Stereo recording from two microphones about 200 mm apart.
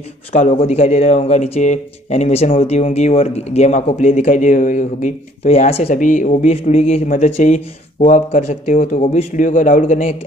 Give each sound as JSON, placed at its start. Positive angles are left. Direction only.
{"t": 0.3, "sound": "speech", "side_deg": 35}